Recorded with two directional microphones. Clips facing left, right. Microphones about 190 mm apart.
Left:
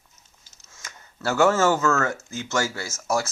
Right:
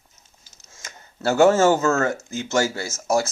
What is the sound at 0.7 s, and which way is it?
Speech, 25° right (ahead or behind).